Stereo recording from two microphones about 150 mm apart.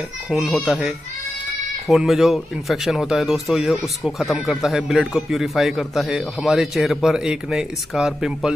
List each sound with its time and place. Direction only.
0.3 s speech: centre (ahead or behind)